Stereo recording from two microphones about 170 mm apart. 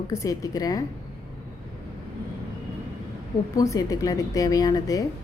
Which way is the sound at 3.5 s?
20° left (ahead or behind).